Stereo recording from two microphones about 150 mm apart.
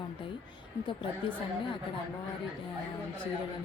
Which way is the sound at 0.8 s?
35° left (ahead or behind).